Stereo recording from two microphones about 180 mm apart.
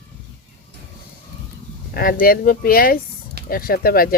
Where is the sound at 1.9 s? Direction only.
55° left (ahead or behind).